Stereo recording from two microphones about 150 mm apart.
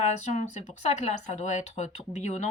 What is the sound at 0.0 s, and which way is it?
Speech, 50° left (ahead or behind).